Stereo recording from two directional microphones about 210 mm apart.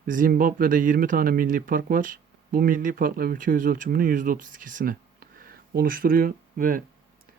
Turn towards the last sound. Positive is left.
turn(degrees=-40)  # may be behind; listen again after turning